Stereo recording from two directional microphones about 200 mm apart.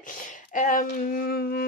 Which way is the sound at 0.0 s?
40° left (ahead or behind).